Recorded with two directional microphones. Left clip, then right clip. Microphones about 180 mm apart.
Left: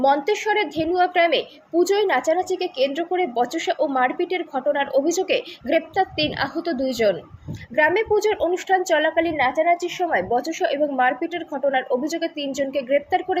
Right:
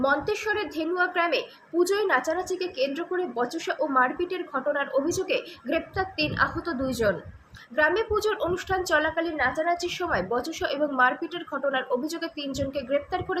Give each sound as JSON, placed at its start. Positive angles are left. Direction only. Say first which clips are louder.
{"t": 0.0, "sound": "a woman's voice", "louder": "left 6 dB", "side_deg": 5}
{"t": 9.5, "sound": "a woman's voice", "louder": "left 7 dB", "side_deg": -35}
{"t": 9.7, "sound": "a woman's voice", "louder": "left 5 dB", "side_deg": 5}